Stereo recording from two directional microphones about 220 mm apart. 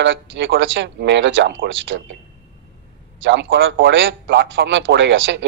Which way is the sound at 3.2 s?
55° right (ahead or behind).